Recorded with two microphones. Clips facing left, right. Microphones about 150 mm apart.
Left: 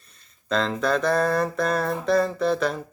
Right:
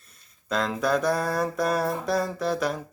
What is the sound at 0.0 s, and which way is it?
Speech, 5° right (ahead or behind).